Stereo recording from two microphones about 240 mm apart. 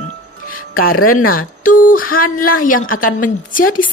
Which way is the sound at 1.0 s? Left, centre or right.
Left.